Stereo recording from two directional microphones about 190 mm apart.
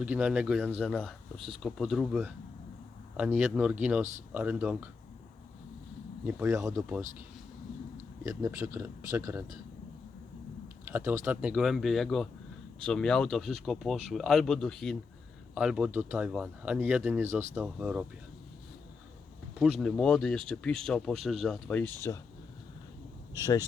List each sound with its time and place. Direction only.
0.0 s speech: 5° right (ahead or behind)
6.2 s speech: 15° right (ahead or behind)
8.2 s speech: 15° right (ahead or behind)
10.8 s speech: 10° right (ahead or behind)
19.5 s speech: centre (ahead or behind)
23.4 s speech: 20° left (ahead or behind)